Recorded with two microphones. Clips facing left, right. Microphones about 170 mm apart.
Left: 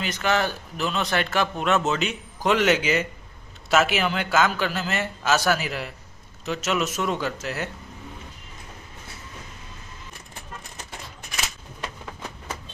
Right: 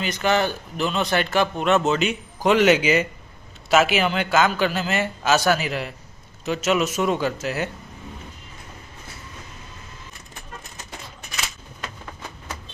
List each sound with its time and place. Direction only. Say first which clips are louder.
0.0 s a man's voice: right 3 dB; centre (ahead or behind)